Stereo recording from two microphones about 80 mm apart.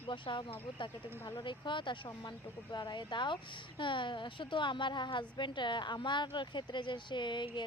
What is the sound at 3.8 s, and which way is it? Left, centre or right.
A woman's voice, left.